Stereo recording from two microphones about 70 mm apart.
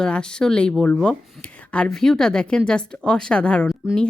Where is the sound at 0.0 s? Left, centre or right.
Centre.